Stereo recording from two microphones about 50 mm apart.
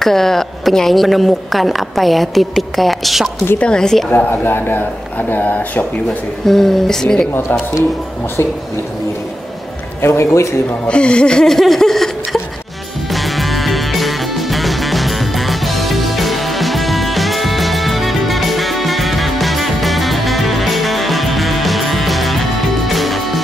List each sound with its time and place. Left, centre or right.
0.0 s a woman's voice: centre
3.5 s speech: centre
4.3 s speech: left
6.4 s speech: centre
10.0 s a man's voice: left
10.9 s laughter: left
13.1 s music: centre